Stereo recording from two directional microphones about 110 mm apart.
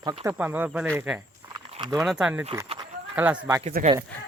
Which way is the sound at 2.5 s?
35° right (ahead or behind).